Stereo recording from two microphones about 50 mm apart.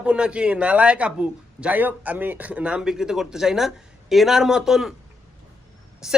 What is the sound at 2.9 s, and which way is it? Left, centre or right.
Speech, centre.